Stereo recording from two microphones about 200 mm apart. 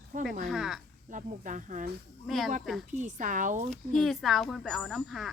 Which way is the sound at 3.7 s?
Centre (ahead or behind).